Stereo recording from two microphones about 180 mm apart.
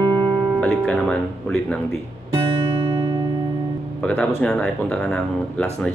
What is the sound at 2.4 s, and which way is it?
Music, 30° right (ahead or behind).